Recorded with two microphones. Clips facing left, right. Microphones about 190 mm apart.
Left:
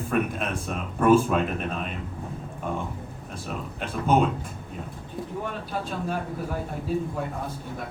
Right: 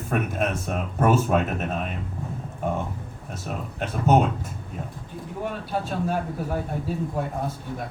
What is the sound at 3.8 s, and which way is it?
Speech, 40° right (ahead or behind).